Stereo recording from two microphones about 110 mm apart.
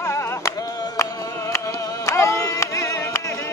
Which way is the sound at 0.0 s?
25° left (ahead or behind).